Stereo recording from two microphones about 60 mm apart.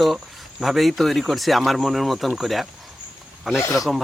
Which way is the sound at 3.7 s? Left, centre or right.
Centre.